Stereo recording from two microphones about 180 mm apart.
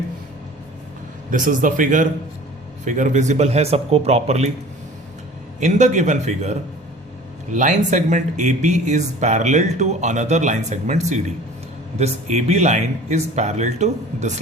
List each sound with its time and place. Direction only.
1.3 s a man's voice: 45° right (ahead or behind)
5.5 s speech: 40° right (ahead or behind)